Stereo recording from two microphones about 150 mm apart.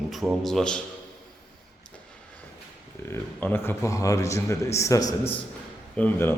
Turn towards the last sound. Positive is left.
turn(degrees=15)  # may be behind; listen again after turning